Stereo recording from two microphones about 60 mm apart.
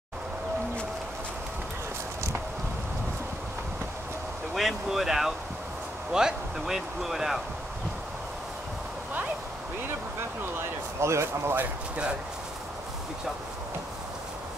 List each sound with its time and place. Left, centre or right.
4.6 s speech: centre
11.0 s speech: right